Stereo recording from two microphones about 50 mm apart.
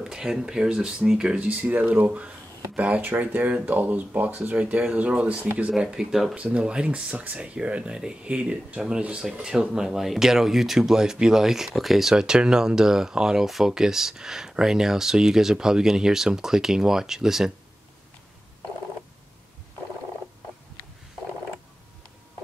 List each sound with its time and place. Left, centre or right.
0.0 s speech: centre
1.3 s speech: right
5.7 s speech: centre
6.3 s speech: right; by 17.5 s centre